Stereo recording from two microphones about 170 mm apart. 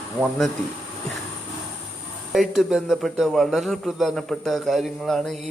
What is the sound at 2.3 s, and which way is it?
A man's voice, centre (ahead or behind).